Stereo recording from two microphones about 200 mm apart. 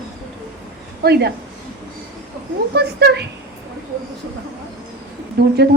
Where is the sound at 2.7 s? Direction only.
55° right (ahead or behind).